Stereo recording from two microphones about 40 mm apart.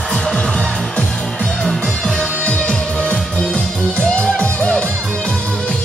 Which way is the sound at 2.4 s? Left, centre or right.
Left.